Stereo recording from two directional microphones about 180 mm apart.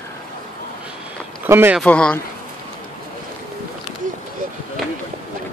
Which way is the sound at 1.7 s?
5° left (ahead or behind).